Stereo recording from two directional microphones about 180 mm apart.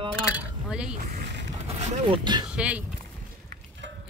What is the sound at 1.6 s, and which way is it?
Speech, 40° right (ahead or behind).